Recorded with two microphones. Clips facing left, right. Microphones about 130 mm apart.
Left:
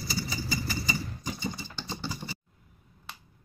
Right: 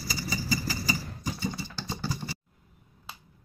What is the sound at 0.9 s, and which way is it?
Vehicle, 10° right (ahead or behind).